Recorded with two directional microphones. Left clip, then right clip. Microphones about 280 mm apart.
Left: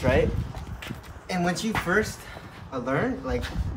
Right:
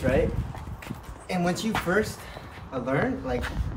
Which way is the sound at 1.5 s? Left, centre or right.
Centre.